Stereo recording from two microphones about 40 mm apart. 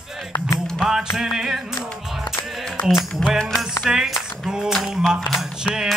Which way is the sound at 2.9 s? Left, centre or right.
Centre.